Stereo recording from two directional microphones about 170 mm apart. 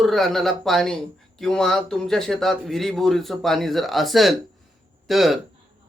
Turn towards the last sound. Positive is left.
turn(degrees=0)  # may be behind; listen again after turning